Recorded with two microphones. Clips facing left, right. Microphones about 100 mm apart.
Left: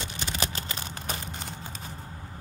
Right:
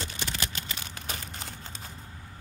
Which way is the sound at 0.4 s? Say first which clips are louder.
Left 4 dB; 35° left (ahead or behind).